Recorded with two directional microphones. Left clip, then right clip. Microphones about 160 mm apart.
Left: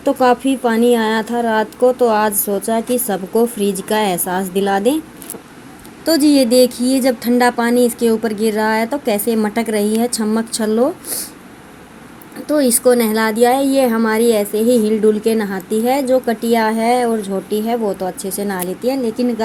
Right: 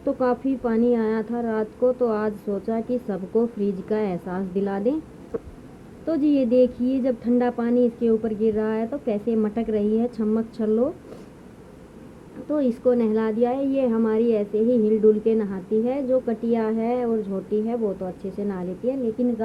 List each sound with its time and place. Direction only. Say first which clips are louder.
0.0 s a woman's voice: left 9 dB; 20° left (ahead or behind)
6.1 s a woman's voice: left 9 dB; 25° left (ahead or behind)
12.5 s a woman's voice: left 8 dB; 20° left (ahead or behind)